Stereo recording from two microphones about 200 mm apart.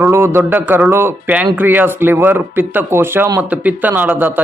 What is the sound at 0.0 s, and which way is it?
A man's voice, 10° right (ahead or behind).